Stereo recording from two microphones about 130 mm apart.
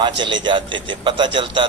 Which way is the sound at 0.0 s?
40° right (ahead or behind).